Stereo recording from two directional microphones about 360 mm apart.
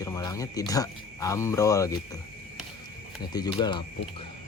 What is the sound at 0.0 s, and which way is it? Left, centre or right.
Speech, centre.